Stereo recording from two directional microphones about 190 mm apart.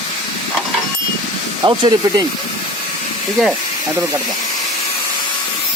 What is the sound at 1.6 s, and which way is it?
Speech, 25° right (ahead or behind).